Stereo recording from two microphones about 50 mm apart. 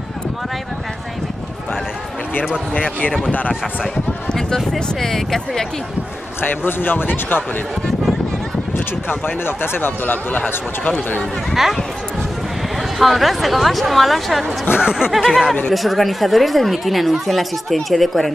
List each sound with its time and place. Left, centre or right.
2.7 s speech: left
3.8 s run: centre
4.7 s speech: centre
6.4 s speech: left
8.7 s speech: left
13.0 s speech: centre
14.8 s speech: centre
15.7 s speech: centre